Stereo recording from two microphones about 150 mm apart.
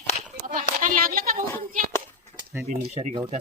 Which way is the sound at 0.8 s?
70° right (ahead or behind).